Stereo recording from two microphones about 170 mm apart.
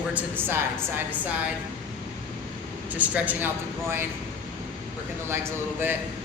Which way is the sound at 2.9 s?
10° right (ahead or behind).